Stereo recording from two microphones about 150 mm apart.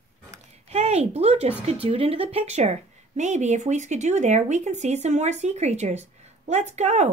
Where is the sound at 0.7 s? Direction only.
45° right (ahead or behind).